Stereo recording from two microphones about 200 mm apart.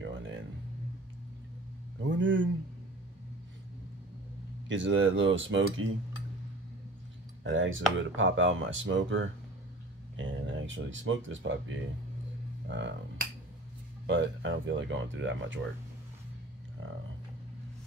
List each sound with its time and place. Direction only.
2.0 s speech: 65° right (ahead or behind)
4.6 s speech: 65° right (ahead or behind)
7.4 s speech: 75° right (ahead or behind)